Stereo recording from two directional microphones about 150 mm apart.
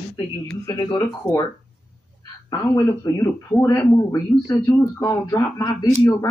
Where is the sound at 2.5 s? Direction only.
20° left (ahead or behind).